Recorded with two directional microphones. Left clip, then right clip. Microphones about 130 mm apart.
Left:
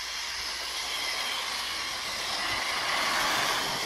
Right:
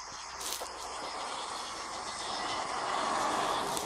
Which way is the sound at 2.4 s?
30° left (ahead or behind).